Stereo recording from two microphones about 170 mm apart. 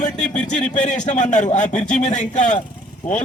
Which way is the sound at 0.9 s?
45° left (ahead or behind).